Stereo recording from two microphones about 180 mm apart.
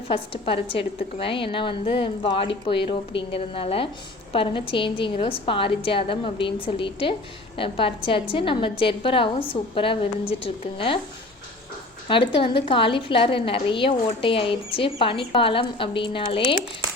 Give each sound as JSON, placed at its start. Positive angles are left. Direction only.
{"t": 0.1, "sound": "a woman's voice", "side_deg": 30}
{"t": 12.0, "sound": "a woman's voice", "side_deg": 30}